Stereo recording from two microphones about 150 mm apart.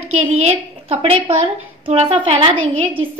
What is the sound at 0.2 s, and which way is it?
A woman's voice, 45° right (ahead or behind).